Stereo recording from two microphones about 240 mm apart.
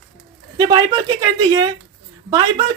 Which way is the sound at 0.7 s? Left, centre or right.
Centre.